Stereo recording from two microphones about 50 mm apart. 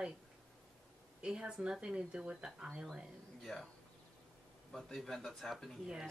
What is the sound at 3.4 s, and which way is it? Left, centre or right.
Speech, centre.